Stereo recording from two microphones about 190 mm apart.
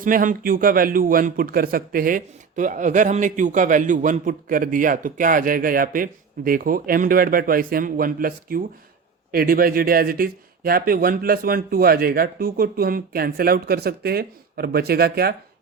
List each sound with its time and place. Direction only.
0.0 s a man's voice: 45° right (ahead or behind)